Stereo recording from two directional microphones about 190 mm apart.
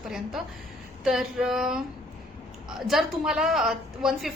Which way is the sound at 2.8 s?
Centre (ahead or behind).